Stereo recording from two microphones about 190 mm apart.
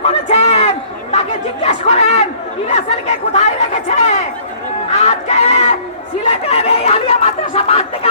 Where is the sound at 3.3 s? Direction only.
40° left (ahead or behind).